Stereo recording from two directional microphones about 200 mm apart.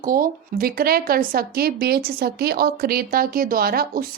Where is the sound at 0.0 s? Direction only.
45° right (ahead or behind).